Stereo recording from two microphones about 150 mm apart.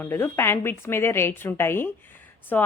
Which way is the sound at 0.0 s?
15° left (ahead or behind).